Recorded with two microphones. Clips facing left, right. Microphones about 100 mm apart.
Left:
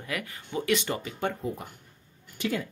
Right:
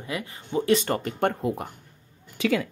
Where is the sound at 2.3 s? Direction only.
90° right.